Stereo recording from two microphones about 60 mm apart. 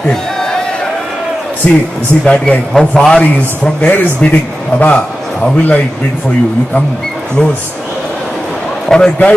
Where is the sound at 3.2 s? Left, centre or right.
Left.